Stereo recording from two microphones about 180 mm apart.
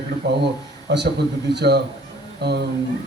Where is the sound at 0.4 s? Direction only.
70° right (ahead or behind).